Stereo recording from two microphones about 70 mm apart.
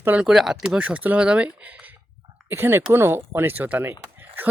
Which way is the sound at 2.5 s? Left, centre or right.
Right.